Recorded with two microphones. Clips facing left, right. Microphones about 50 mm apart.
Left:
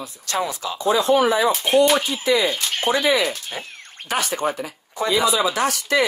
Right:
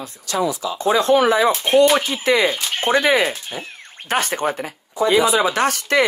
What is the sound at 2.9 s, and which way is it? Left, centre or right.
Speech, right.